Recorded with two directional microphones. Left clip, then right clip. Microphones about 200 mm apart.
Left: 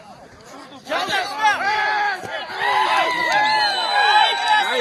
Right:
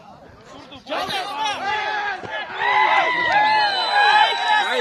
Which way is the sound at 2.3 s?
50° left (ahead or behind).